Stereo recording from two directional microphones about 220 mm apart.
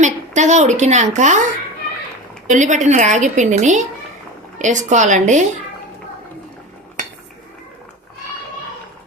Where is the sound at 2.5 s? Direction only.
35° right (ahead or behind).